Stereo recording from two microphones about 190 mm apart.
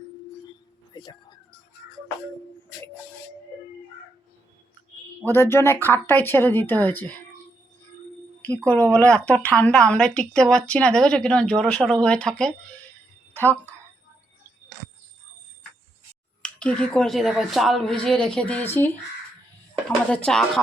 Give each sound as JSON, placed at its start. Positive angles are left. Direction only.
{"t": 0.9, "sound": "a sound", "side_deg": 20}
{"t": 5.2, "sound": "speech", "side_deg": 10}
{"t": 8.4, "sound": "a woman's voice", "side_deg": 10}
{"t": 16.4, "sound": "a woman's voice", "side_deg": 5}
{"t": 20.1, "sound": "a woman's voice", "side_deg": 5}